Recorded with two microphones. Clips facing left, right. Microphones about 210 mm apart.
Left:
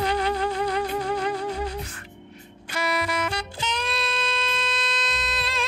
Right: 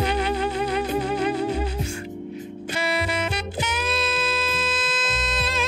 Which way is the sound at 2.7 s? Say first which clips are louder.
Right 1 dB; 25° right (ahead or behind).